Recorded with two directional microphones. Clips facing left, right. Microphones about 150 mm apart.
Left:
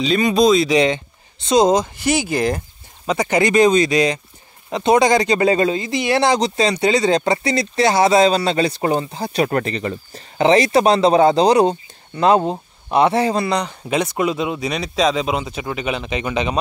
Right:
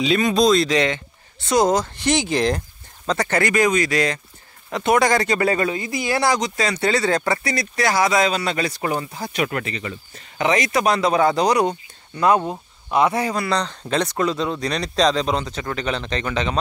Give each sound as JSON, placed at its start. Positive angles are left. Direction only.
{"t": 0.0, "sound": "speech", "side_deg": 0}
{"t": 0.7, "sound": "speech", "side_deg": 15}
{"t": 2.0, "sound": "speech", "side_deg": 5}
{"t": 13.5, "sound": "speech", "side_deg": 10}